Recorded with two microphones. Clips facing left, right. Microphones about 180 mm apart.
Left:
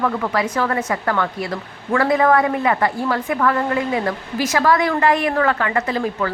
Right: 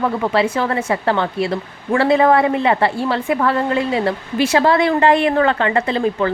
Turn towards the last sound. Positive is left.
turn(degrees=-30)  # may be behind; listen again after turning